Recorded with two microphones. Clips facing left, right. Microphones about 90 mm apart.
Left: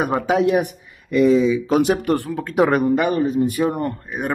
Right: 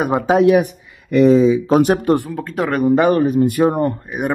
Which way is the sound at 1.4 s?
35° right (ahead or behind).